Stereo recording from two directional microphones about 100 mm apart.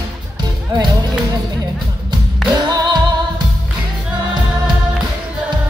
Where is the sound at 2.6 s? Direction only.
45° right (ahead or behind).